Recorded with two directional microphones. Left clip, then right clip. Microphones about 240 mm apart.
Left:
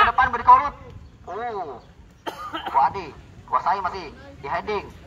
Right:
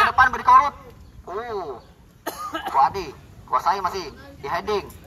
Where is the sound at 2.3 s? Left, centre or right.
Right.